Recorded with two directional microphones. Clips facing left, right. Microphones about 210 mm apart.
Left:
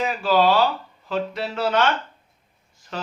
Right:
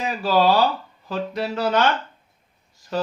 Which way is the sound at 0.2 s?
40° right (ahead or behind).